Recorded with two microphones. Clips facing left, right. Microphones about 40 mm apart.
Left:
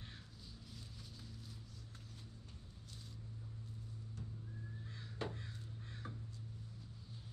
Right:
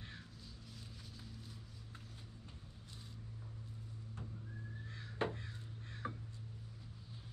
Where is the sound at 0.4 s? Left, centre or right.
Centre.